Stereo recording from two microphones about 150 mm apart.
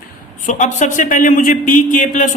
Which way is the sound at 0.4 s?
55° left (ahead or behind).